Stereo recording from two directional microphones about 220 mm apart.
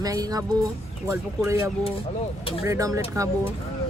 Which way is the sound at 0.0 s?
15° right (ahead or behind).